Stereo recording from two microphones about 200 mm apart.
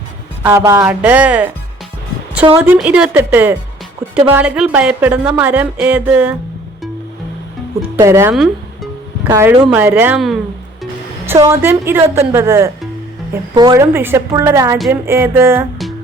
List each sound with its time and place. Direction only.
0.4 s a woman's voice: 15° right (ahead or behind)
2.6 s a woman's voice: 10° right (ahead or behind)
7.9 s a woman's voice: 15° right (ahead or behind)
8.3 s music: centre (ahead or behind)
9.3 s a woman's voice: 10° right (ahead or behind)
11.5 s a woman's voice: 10° right (ahead or behind)